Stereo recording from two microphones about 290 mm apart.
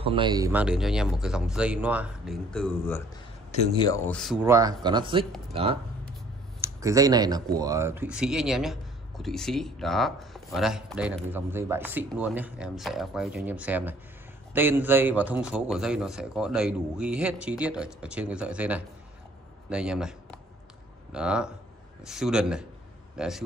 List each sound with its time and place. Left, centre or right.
0.0 s speech: centre
3.5 s speech: centre
4.1 s a man's voice: centre